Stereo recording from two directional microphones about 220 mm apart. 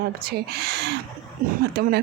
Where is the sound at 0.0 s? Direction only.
45° right (ahead or behind).